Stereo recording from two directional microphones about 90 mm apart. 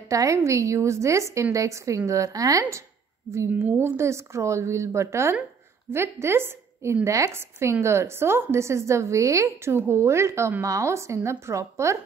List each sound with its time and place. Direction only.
0.1 s a woman's voice: 35° right (ahead or behind)